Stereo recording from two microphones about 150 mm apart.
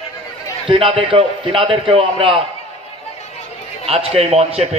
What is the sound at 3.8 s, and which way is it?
Speech, 40° right (ahead or behind).